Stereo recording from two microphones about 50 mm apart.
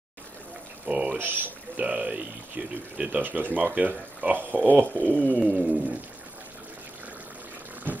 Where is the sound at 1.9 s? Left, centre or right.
Right.